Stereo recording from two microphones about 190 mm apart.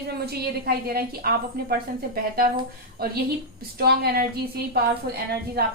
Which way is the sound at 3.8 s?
55° right (ahead or behind).